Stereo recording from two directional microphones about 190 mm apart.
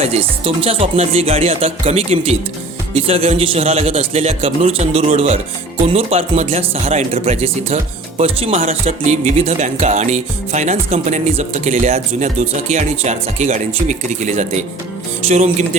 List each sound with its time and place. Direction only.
0.0 s speech: 30° right (ahead or behind)